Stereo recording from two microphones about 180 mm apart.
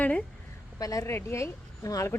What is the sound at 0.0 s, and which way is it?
Speech, 5° left (ahead or behind).